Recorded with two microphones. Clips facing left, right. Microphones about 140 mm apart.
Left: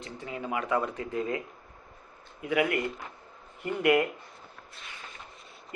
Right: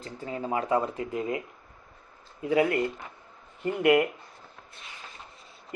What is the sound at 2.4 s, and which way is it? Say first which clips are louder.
Speech: right 3 dB; 30° right (ahead or behind).